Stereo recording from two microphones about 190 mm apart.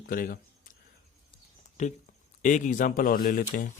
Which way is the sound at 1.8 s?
40° left (ahead or behind).